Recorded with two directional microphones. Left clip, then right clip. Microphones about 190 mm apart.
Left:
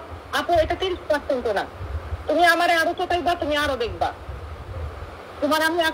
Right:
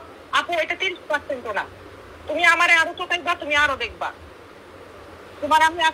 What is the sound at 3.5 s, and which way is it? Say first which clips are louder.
Speech: right 3 dB; 75° right (ahead or behind).